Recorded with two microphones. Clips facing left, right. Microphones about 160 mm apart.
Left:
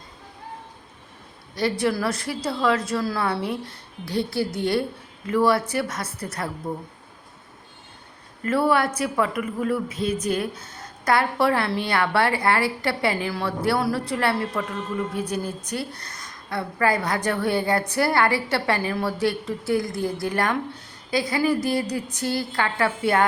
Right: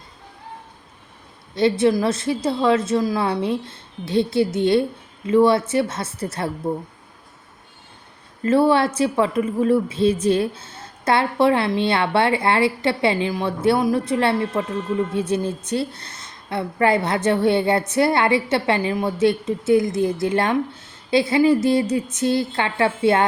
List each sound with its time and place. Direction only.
1.5 s a woman's voice: 25° right (ahead or behind)
8.4 s a woman's voice: 25° right (ahead or behind)